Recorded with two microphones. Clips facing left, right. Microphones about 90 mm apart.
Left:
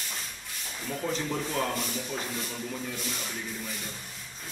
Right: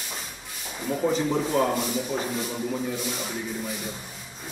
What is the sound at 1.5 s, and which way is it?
A man's voice, 10° right (ahead or behind).